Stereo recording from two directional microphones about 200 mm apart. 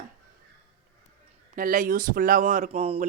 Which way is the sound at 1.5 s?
40° right (ahead or behind).